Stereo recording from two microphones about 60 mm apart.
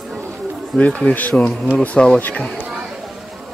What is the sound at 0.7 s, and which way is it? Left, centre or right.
Speech, left.